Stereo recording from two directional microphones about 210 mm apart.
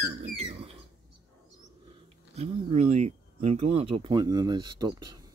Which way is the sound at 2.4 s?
30° right (ahead or behind).